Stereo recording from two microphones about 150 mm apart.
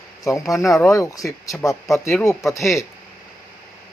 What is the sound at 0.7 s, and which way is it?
Speech, 20° left (ahead or behind).